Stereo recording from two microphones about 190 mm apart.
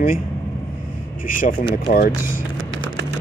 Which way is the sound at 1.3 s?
45° left (ahead or behind).